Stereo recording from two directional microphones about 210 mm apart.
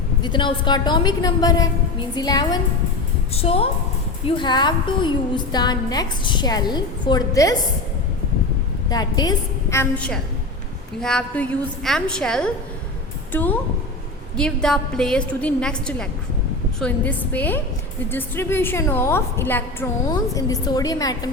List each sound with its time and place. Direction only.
0.2 s a woman's voice: 20° left (ahead or behind)
8.9 s a woman's voice: 20° left (ahead or behind)